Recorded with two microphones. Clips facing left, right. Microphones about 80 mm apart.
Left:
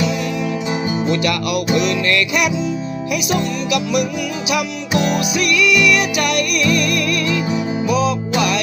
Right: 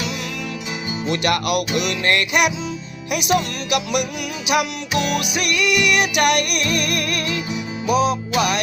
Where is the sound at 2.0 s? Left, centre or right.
Right.